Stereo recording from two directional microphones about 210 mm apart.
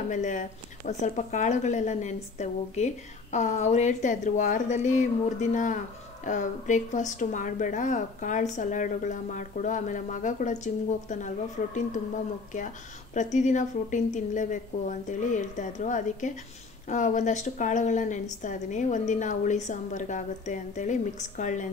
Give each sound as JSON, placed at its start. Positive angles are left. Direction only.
{"t": 0.1, "sound": "speech", "side_deg": 35}
{"t": 13.1, "sound": "speech", "side_deg": 35}